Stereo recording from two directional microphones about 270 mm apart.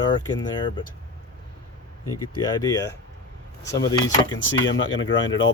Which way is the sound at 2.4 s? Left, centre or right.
Centre.